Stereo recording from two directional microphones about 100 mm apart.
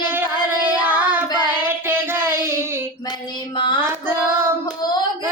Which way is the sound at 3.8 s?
25° right (ahead or behind).